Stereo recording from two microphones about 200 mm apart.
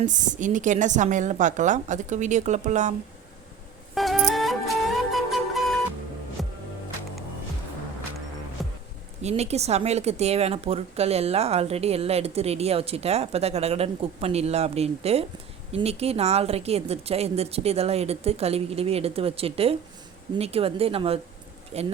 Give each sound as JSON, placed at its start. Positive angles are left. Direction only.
{"t": 0.0, "sound": "a woman's voice", "side_deg": -40}
{"t": 3.9, "sound": "music", "side_deg": 0}
{"t": 8.6, "sound": "music", "side_deg": 0}
{"t": 9.2, "sound": "a woman's voice", "side_deg": -35}